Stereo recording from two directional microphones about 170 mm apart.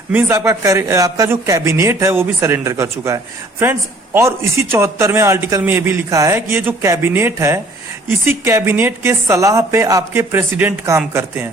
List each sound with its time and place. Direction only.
0.1 s a man's voice: 15° right (ahead or behind)